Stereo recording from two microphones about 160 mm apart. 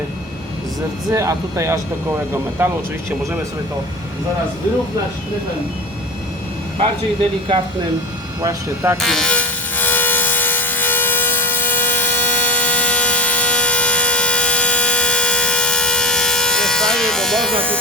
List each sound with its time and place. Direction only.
1.1 s speech: 20° right (ahead or behind)
8.4 s speech: 20° right (ahead or behind)
9.0 s wood: centre (ahead or behind)